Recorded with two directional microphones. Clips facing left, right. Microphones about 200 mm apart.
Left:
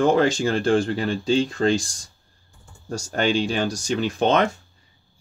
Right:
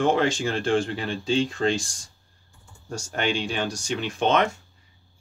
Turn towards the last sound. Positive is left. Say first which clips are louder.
# left 3 dB
turn(degrees=35)  # may be behind; listen again after turning